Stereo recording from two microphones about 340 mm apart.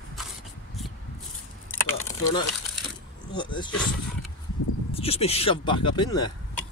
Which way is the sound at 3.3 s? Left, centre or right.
Centre.